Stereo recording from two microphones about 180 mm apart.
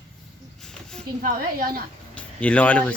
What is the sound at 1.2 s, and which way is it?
Speech, 55° right (ahead or behind).